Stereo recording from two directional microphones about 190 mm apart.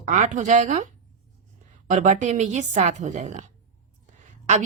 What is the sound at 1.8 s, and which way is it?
A woman's voice, 40° right (ahead or behind).